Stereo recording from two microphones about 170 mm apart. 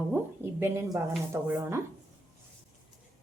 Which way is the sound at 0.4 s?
15° right (ahead or behind).